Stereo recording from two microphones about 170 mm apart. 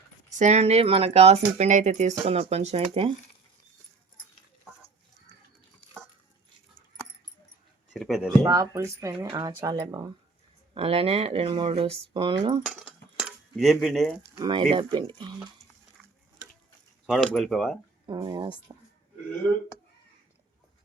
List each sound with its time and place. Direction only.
0.3 s speech: 45° right (ahead or behind)
5.8 s dog: 35° left (ahead or behind)
7.9 s speech: centre (ahead or behind)
8.4 s speech: 20° right (ahead or behind)
10.8 s speech: 35° right (ahead or behind)
12.6 s cutlery: 5° right (ahead or behind)
14.3 s speech: 25° right (ahead or behind)
17.1 s speech: centre (ahead or behind)
18.0 s speech: 25° right (ahead or behind)